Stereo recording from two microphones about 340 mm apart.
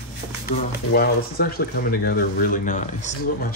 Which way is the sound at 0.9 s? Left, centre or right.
Left.